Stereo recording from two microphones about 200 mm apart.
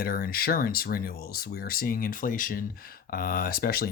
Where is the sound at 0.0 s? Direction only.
45° left (ahead or behind).